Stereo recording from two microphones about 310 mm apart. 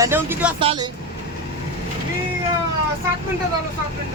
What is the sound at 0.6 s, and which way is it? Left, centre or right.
Speech, centre.